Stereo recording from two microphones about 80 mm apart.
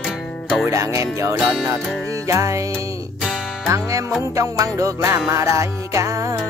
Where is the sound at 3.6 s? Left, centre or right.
Right.